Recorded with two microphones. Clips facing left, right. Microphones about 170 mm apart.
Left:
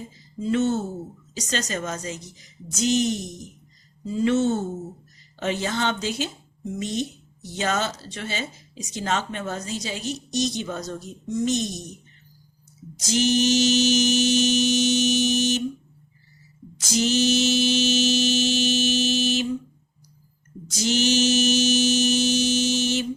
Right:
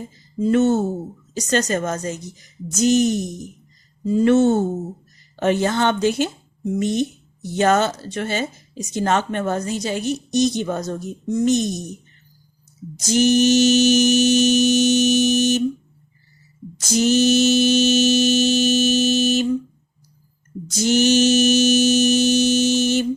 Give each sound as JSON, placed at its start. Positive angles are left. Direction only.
{"t": 0.3, "sound": "a woman's voice", "side_deg": -50}
{"t": 13.1, "sound": "mantra", "side_deg": -50}
{"t": 16.9, "sound": "mantra", "side_deg": -50}
{"t": 20.7, "sound": "mantra", "side_deg": -50}